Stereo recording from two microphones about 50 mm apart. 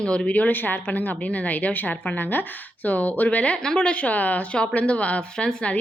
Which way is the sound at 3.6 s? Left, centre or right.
Centre.